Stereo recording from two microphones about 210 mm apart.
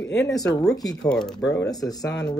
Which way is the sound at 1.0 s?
5° left (ahead or behind).